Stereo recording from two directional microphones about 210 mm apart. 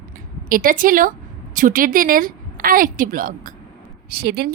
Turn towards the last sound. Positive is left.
turn(degrees=-50)  # may be behind; listen again after turning